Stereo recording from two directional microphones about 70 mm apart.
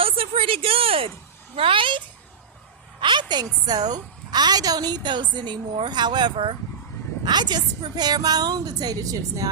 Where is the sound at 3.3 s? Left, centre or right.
Right.